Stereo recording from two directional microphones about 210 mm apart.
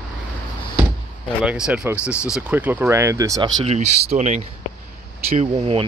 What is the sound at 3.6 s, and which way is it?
Speech, 30° right (ahead or behind).